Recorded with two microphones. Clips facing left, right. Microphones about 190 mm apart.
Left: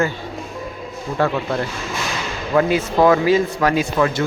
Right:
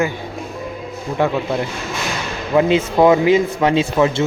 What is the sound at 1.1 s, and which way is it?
A man's voice, 15° right (ahead or behind).